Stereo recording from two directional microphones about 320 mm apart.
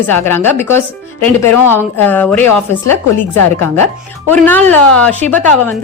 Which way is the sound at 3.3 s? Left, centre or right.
Left.